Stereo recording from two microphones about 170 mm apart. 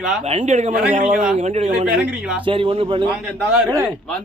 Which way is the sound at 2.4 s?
30° right (ahead or behind).